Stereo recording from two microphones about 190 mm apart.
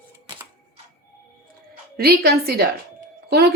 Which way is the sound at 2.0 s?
55° right (ahead or behind).